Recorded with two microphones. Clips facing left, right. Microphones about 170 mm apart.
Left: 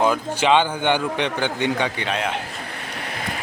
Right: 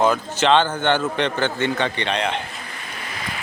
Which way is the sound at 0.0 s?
10° left (ahead or behind).